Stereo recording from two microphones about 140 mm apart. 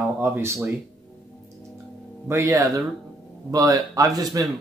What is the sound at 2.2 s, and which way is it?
Speech, 20° right (ahead or behind).